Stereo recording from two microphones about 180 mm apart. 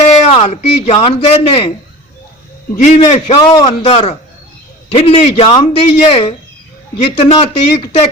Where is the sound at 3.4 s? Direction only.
25° left (ahead or behind).